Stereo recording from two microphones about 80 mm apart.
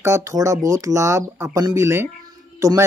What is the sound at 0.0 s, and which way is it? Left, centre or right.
Speech, right.